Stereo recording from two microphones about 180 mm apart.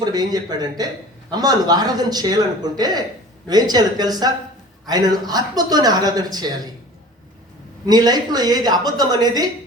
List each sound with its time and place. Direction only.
0.0 s a man's voice: 20° right (ahead or behind)
7.9 s a man's voice: 20° right (ahead or behind)